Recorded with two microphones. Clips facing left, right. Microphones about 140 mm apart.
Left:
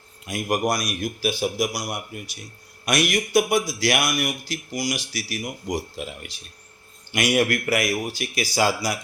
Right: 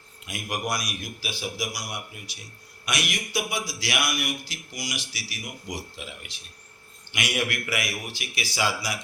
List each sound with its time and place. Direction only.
0.3 s a man's voice: 45° left (ahead or behind)